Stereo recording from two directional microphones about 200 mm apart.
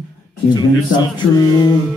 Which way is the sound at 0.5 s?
20° left (ahead or behind).